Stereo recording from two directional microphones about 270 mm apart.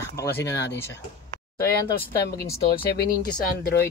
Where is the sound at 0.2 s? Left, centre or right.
Centre.